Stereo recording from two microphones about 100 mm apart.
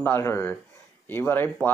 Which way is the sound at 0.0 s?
25° left (ahead or behind).